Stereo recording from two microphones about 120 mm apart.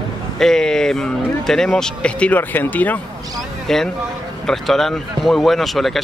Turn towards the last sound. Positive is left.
turn(degrees=0)  # may be behind; listen again after turning